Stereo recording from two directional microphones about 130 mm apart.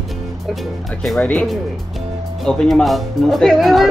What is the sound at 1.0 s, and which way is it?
Speech, 10° left (ahead or behind).